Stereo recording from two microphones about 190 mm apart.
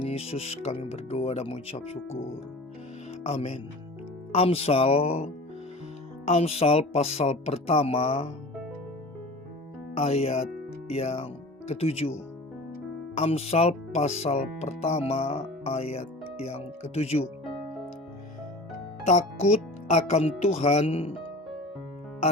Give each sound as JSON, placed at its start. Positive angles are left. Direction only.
{"t": 0.0, "sound": "speech", "side_deg": 30}
{"t": 3.2, "sound": "speech", "side_deg": 35}
{"t": 9.9, "sound": "speech", "side_deg": 30}
{"t": 13.1, "sound": "speech", "side_deg": 30}
{"t": 19.0, "sound": "speech", "side_deg": 35}